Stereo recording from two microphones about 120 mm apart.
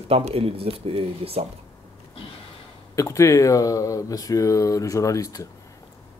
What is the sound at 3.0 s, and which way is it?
Speech, 25° left (ahead or behind).